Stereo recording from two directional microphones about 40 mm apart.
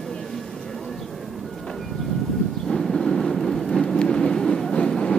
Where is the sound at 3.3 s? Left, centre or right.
Centre; by 4.9 s left.